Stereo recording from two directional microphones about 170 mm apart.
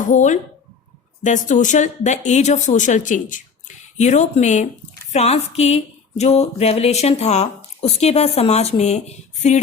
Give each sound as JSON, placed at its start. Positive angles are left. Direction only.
{"t": 0.1, "sound": "speech", "side_deg": 45}